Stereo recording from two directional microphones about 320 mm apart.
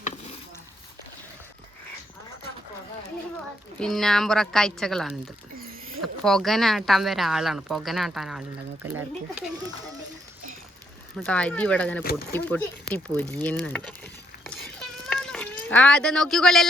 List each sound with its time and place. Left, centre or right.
3.8 s speech: centre
5.5 s rodents: right
6.2 s speech: centre
11.2 s speech: centre
15.1 s a sound: centre